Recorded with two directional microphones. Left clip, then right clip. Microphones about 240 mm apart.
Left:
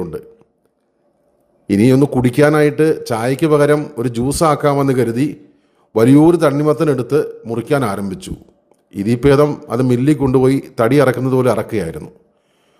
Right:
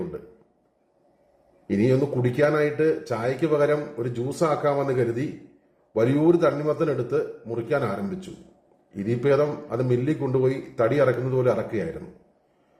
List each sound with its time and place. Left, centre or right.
1.6 s a man's voice: left